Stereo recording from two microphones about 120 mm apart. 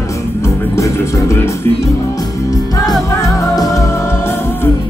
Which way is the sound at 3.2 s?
30° left (ahead or behind).